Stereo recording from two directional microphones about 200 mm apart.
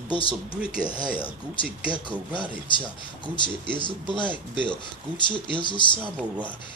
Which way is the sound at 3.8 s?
25° left (ahead or behind).